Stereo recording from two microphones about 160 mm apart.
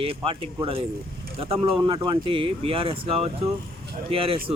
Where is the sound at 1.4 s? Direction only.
35° right (ahead or behind).